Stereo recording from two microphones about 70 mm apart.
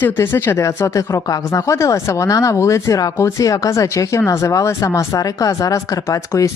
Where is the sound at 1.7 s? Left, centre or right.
Left.